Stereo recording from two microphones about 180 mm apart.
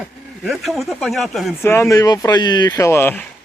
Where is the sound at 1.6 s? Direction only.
15° left (ahead or behind).